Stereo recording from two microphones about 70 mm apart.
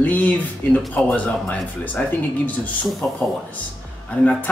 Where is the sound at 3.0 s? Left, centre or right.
Left.